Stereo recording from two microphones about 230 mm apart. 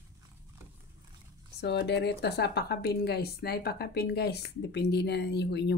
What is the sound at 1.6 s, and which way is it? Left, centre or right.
Speech, left.